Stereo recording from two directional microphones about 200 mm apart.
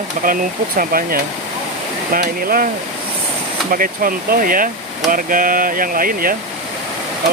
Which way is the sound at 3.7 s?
45° right (ahead or behind).